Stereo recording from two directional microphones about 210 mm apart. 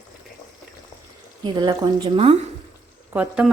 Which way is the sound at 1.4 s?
20° right (ahead or behind).